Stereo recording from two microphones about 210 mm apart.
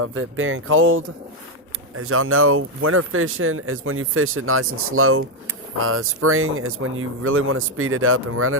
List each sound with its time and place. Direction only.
0.0 s speech: 75° right (ahead or behind)
2.0 s speech: 85° right